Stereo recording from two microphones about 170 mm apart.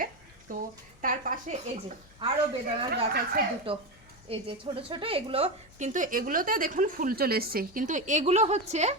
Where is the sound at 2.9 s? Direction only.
65° right (ahead or behind).